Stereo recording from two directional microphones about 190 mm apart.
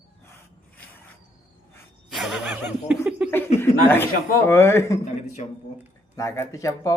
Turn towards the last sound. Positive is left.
turn(degrees=15)  # may be behind; listen again after turning